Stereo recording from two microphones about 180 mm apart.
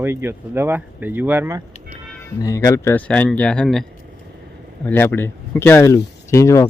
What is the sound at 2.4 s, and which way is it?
Speech, 20° left (ahead or behind).